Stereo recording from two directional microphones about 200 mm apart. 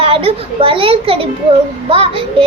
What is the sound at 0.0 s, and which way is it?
A child's voice, 30° right (ahead or behind).